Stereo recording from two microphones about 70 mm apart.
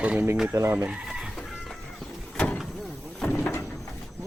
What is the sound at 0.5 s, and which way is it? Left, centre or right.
Speech, right.